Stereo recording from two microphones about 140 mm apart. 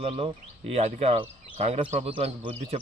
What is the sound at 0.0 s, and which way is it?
Speech, 45° right (ahead or behind).